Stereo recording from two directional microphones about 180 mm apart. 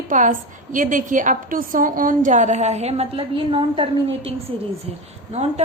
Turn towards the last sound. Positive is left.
turn(degrees=-35)  # may be behind; listen again after turning